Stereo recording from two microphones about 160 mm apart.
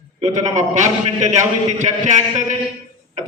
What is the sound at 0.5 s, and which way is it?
A man's voice, 50° right (ahead or behind).